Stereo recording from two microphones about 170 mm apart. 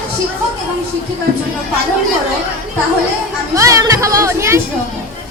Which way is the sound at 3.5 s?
20° right (ahead or behind).